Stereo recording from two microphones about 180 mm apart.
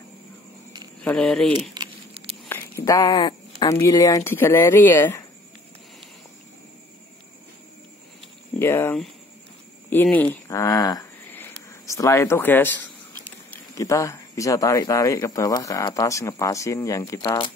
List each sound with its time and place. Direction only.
1.0 s speech: 5° left (ahead or behind)
1.7 s keys jangling: 25° right (ahead or behind)
2.4 s speech: 15° left (ahead or behind)
8.5 s speech: 10° left (ahead or behind)